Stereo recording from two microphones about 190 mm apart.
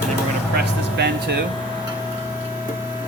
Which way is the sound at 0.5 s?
60° right (ahead or behind).